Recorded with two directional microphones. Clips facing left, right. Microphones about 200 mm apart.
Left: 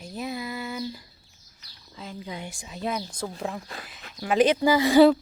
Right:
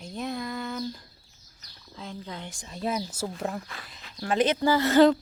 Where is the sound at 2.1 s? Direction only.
10° left (ahead or behind).